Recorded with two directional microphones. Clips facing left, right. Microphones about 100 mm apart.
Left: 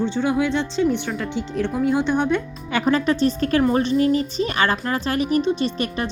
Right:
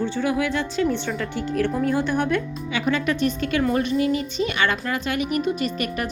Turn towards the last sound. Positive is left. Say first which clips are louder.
# left 2 dB
turn(degrees=30)  # may be behind; listen again after turning